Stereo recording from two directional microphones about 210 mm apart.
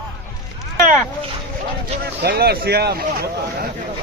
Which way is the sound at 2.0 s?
50° right (ahead or behind).